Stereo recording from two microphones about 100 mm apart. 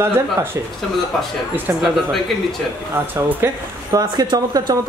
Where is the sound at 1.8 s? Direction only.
Centre (ahead or behind).